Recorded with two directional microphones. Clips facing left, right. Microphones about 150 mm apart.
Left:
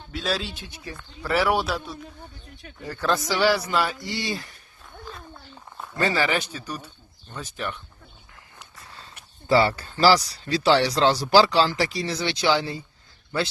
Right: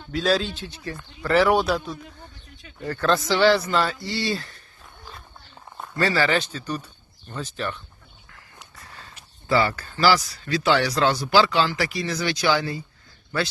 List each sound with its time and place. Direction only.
0.1 s speech: centre (ahead or behind)
0.5 s a man's voice: 15° left (ahead or behind)
6.0 s a man's voice: 20° left (ahead or behind)
9.5 s speech: 30° left (ahead or behind)